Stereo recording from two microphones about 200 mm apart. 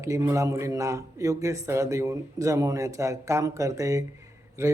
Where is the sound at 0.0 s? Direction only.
15° right (ahead or behind).